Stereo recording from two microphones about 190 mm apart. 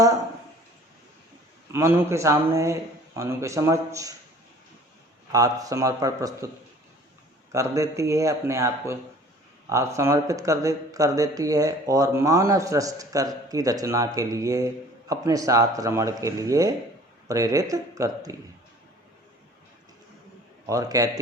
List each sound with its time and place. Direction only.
1.7 s speech: 10° right (ahead or behind)
5.3 s speech: 20° right (ahead or behind)
7.5 s speech: 15° right (ahead or behind)
20.7 s speech: 20° right (ahead or behind)